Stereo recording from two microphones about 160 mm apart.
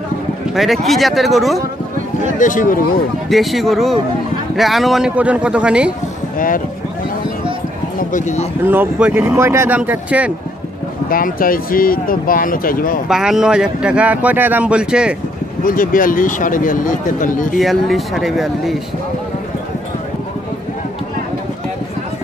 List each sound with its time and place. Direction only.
0.6 s speech: centre (ahead or behind)
2.3 s speech: 55° left (ahead or behind)
3.3 s speech: centre (ahead or behind)
6.3 s speech: 60° left (ahead or behind)
8.0 s speech: 50° left (ahead or behind)
8.6 s speech: 10° right (ahead or behind)
11.1 s speech: 65° left (ahead or behind)
13.1 s speech: 5° right (ahead or behind)
15.6 s speech: 60° left (ahead or behind)
17.6 s speech: centre (ahead or behind)